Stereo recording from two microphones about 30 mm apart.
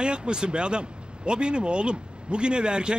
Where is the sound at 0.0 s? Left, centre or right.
Right.